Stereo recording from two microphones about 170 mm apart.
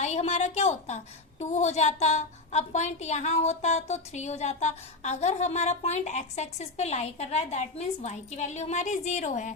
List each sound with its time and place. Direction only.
0.0 s a woman's voice: 40° left (ahead or behind)